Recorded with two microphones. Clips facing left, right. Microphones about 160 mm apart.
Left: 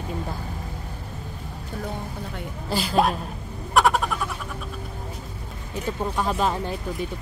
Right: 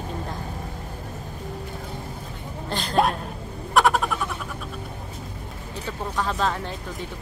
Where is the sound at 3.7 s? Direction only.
Centre (ahead or behind).